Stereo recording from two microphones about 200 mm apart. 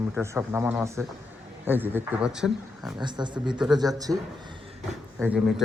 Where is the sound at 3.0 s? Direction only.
20° right (ahead or behind).